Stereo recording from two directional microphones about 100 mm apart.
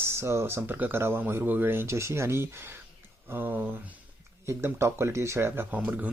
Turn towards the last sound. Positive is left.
turn(degrees=-15)  # may be behind; listen again after turning